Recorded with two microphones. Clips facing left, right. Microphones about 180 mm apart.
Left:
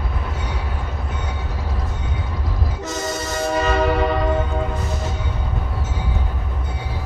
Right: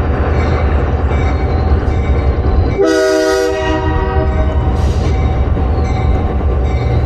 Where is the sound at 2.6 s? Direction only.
90° right.